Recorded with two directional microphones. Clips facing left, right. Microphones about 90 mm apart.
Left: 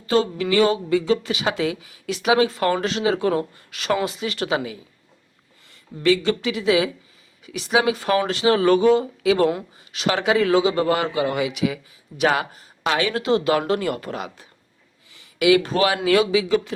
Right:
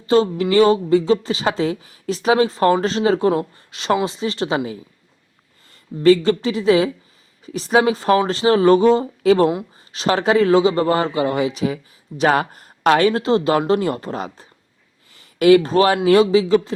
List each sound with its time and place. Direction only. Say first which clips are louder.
0.0 s a woman's voice: right 4 dB; 30° right (ahead or behind)
6.0 s a woman's voice: right 6 dB; 35° right (ahead or behind)